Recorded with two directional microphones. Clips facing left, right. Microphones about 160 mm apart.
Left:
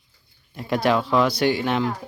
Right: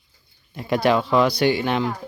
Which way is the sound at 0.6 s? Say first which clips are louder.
Right 2 dB; centre (ahead or behind).